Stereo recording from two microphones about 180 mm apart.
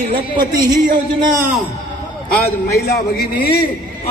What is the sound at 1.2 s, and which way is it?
Speech, 20° right (ahead or behind).